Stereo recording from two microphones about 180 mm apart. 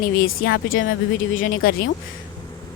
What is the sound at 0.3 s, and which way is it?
Speech, 80° left.